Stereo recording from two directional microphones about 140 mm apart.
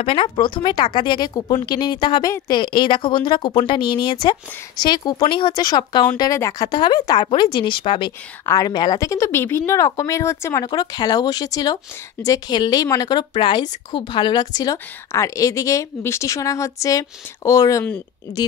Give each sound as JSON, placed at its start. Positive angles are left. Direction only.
{"t": 0.0, "sound": "speech", "side_deg": 40}
{"t": 8.5, "sound": "a woman's voice", "side_deg": 25}